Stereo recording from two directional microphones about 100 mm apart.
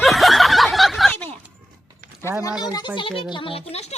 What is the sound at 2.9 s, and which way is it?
Speech, 60° left (ahead or behind).